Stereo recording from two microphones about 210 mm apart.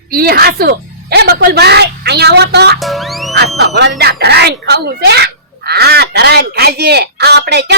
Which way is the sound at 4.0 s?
50° right (ahead or behind).